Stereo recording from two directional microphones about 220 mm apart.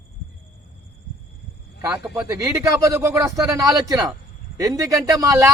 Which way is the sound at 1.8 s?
10° right (ahead or behind).